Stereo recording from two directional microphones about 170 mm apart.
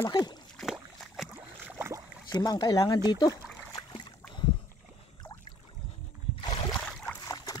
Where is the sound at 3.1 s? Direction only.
25° left (ahead or behind).